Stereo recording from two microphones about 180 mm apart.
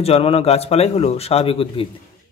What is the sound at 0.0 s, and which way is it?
A man's voice, 35° left (ahead or behind).